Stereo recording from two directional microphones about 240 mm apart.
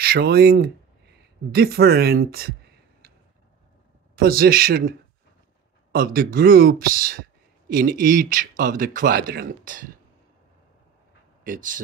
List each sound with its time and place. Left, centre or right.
0.0 s speech: right
4.1 s speech: right
11.4 s speech: right